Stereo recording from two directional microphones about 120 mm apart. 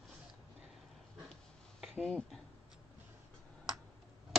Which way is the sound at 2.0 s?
Centre (ahead or behind).